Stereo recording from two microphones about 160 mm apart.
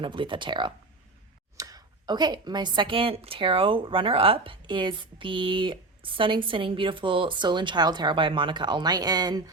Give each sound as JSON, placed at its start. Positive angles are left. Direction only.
{"t": 0.0, "sound": "speech", "side_deg": -30}